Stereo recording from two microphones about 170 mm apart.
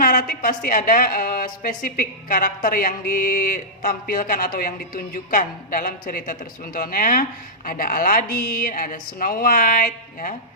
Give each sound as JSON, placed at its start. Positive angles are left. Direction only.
{"t": 0.0, "sound": "a woman's voice", "side_deg": 55}